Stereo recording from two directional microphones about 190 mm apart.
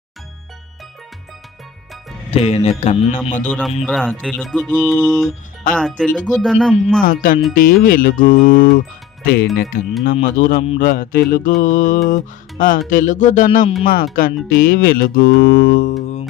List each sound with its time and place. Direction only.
2.3 s speech: 30° left (ahead or behind)
3.8 s music: centre (ahead or behind)
7.0 s music: 50° left (ahead or behind)